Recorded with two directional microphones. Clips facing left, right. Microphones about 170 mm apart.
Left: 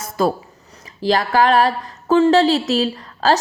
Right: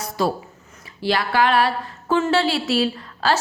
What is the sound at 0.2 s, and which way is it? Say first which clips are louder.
Speech: left 4 dB; 45° left (ahead or behind).